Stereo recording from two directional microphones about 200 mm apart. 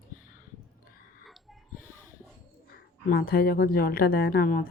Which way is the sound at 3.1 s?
50° left (ahead or behind).